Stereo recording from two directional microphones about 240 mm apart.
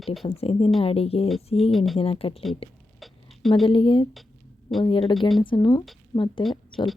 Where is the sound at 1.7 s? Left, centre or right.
Centre.